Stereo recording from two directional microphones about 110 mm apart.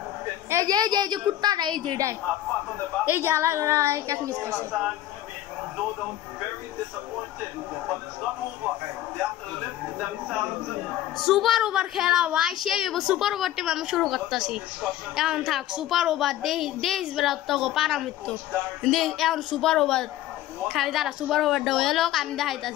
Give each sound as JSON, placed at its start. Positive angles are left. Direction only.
{"t": 0.5, "sound": "a woman's voice", "side_deg": -35}
{"t": 3.1, "sound": "a woman's voice", "side_deg": -20}
{"t": 4.7, "sound": "speech", "side_deg": -10}
{"t": 11.1, "sound": "a woman's voice", "side_deg": 0}